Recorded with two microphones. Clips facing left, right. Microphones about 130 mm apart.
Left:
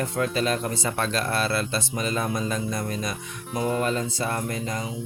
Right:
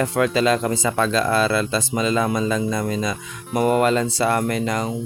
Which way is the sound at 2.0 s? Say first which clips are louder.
Right 7 dB; 90° right.